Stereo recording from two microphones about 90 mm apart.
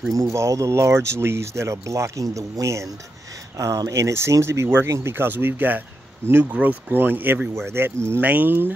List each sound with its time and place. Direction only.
0.1 s speech: 35° right (ahead or behind); by 8.7 s 20° right (ahead or behind)